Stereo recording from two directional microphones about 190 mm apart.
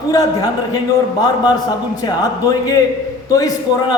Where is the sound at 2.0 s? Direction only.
20° left (ahead or behind).